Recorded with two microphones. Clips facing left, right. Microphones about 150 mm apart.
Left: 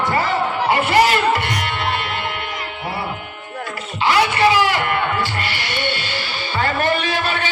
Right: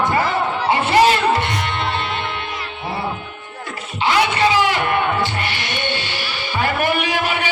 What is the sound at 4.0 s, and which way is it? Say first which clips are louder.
Music: left 1 dB; 20° right (ahead or behind).